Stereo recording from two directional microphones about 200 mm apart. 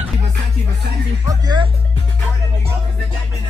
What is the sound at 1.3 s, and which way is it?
Speech, 20° right (ahead or behind).